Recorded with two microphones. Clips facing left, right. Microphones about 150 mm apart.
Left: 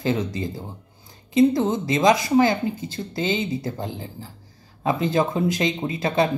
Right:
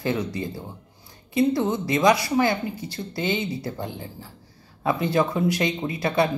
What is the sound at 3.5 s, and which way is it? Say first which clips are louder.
Speech: left 3 dB; 45° left (ahead or behind).